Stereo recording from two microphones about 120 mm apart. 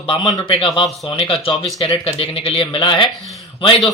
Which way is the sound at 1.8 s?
50° left (ahead or behind).